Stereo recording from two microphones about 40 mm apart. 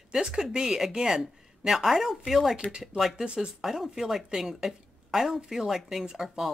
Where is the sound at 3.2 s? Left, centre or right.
Right.